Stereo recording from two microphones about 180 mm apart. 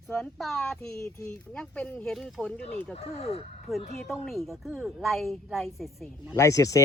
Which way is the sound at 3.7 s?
Centre (ahead or behind).